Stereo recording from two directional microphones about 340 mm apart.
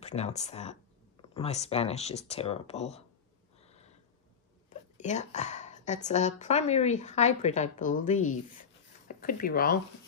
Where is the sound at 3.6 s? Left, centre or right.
Centre.